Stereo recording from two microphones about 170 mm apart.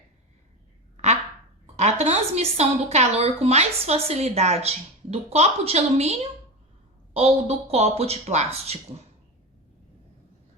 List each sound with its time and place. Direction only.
1.7 s a woman's voice: 40° right (ahead or behind)